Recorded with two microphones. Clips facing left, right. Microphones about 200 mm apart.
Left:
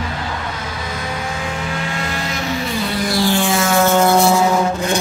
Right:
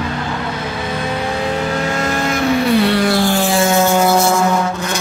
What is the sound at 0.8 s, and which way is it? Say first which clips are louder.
Vehicle: right 6 dB; 30° right (ahead or behind).